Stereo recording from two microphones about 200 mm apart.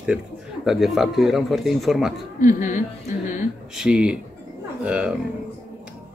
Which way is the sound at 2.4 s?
40° left (ahead or behind).